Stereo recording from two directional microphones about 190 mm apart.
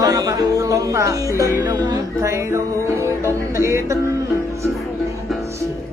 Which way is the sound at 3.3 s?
15° right (ahead or behind).